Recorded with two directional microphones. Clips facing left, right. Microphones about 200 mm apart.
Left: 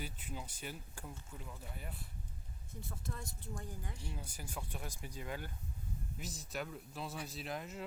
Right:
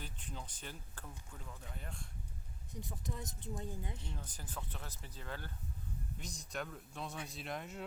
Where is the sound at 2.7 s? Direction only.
15° right (ahead or behind).